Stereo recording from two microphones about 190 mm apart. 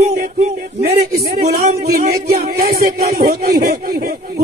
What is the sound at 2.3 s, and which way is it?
Music, 55° right (ahead or behind).